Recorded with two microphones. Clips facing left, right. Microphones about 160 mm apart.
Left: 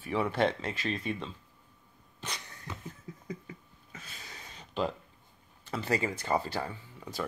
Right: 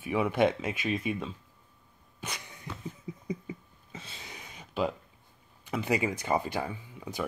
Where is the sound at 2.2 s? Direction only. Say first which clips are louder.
Right 1 dB; 10° right (ahead or behind).